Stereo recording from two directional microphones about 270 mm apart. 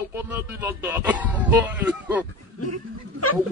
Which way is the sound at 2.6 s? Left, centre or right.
Left.